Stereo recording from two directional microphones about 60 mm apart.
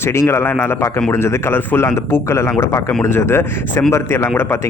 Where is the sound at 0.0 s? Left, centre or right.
Left.